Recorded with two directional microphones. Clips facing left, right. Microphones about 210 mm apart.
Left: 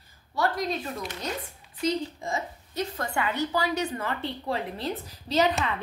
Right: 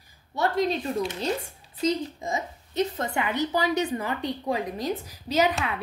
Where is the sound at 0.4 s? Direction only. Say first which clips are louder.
Right 3 dB; 25° right (ahead or behind).